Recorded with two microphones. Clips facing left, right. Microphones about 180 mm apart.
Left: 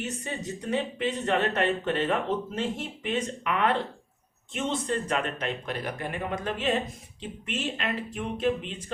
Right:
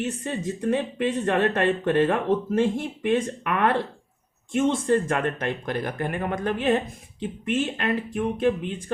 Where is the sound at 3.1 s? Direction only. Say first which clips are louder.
Right 5 dB; 50° right (ahead or behind).